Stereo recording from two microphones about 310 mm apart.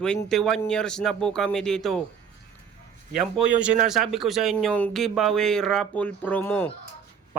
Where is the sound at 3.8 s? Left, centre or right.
Centre.